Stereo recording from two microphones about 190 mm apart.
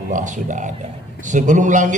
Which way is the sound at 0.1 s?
40° right (ahead or behind).